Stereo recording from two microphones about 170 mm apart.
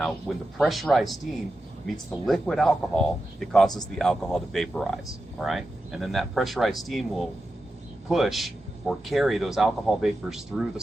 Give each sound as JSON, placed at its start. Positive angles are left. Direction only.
{"t": 0.0, "sound": "speech", "side_deg": 0}
{"t": 2.2, "sound": "speech", "side_deg": 0}